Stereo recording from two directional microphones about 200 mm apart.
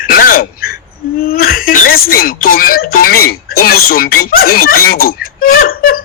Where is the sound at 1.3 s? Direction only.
50° left (ahead or behind).